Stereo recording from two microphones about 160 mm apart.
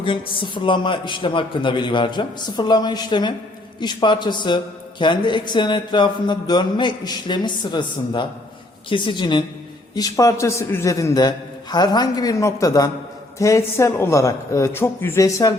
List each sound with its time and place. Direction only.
0.0 s a man's voice: 30° left (ahead or behind)